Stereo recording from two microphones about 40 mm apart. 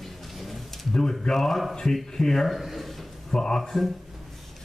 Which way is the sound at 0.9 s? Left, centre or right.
Centre.